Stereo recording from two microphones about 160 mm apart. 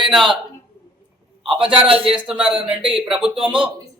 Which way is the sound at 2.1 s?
5° right (ahead or behind).